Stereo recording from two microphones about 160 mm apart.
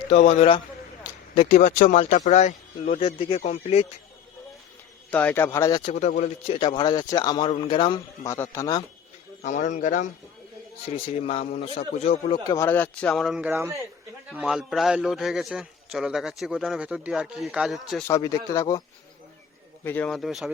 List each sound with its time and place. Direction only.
0.1 s a man's voice: 40° left (ahead or behind)
1.5 s a man's voice: 55° left (ahead or behind)
5.1 s a man's voice: 10° left (ahead or behind)
5.8 s a man's voice: 45° left (ahead or behind)
8.3 s speech: 20° left (ahead or behind)
9.4 s a man's voice: 50° left (ahead or behind)
10.8 s a man's voice: 35° left (ahead or behind)
12.5 s a man's voice: 15° left (ahead or behind); by 13.7 s 15° right (ahead or behind)
14.3 s a man's voice: 5° right (ahead or behind)
18.1 s speech: 20° left (ahead or behind)
19.8 s a man's voice: 10° left (ahead or behind)